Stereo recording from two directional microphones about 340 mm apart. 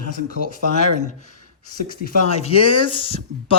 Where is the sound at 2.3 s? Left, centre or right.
Centre.